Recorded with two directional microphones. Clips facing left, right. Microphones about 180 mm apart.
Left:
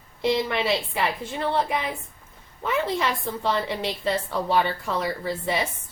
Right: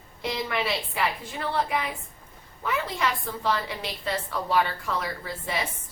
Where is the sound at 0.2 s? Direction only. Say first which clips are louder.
Left 5 dB; 25° left (ahead or behind).